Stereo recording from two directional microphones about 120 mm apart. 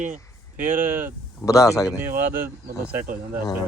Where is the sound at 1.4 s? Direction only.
25° left (ahead or behind).